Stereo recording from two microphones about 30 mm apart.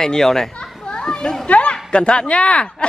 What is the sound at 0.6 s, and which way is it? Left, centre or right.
Children playing, left.